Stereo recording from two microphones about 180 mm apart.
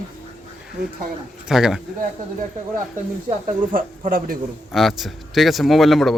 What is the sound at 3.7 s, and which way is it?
Speech, 50° right (ahead or behind).